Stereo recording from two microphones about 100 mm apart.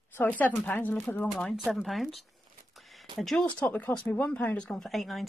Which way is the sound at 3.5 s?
15° left (ahead or behind).